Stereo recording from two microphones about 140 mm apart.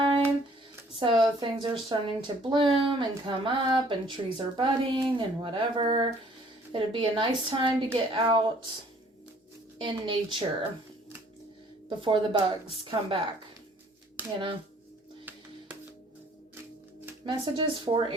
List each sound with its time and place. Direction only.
0.9 s speech: 35° right (ahead or behind)
9.8 s speech: 35° right (ahead or behind)
11.9 s speech: 35° right (ahead or behind)
14.2 s speech: 10° right (ahead or behind)
15.2 s music: 15° right (ahead or behind)
17.2 s speech: 35° right (ahead or behind)